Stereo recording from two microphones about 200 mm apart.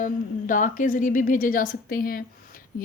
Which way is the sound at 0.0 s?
40° left (ahead or behind).